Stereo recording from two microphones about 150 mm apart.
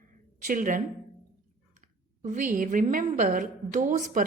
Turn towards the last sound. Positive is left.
turn(degrees=-60)  # may be behind; listen again after turning